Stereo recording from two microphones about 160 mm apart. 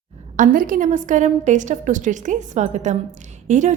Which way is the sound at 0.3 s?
60° right (ahead or behind).